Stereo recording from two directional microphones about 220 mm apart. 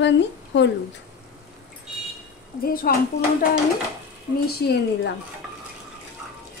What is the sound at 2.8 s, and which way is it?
Speech, 40° left (ahead or behind).